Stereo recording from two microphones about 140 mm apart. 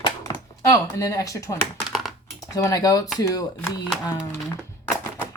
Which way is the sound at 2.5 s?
25° left (ahead or behind).